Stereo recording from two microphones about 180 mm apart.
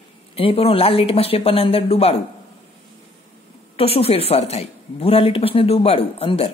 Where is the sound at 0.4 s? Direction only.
30° left (ahead or behind).